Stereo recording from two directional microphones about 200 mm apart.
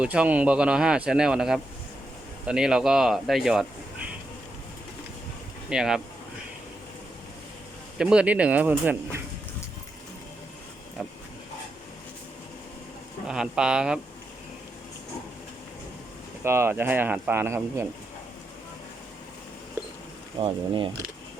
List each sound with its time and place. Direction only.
0.0 s speech: 5° right (ahead or behind)
5.6 s speech: 5° right (ahead or behind)
7.9 s speech: 5° right (ahead or behind)
13.2 s speech: 5° right (ahead or behind)
16.4 s speech: 10° right (ahead or behind)
20.4 s speech: 25° right (ahead or behind)